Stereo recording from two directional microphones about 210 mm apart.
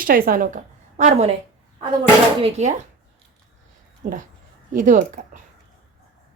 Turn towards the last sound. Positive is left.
turn(degrees=-40)  # may be behind; listen again after turning